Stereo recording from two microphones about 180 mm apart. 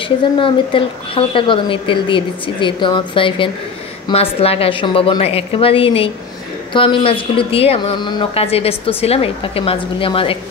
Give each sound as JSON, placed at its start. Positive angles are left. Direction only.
{"t": 0.4, "sound": "a woman's voice", "side_deg": 30}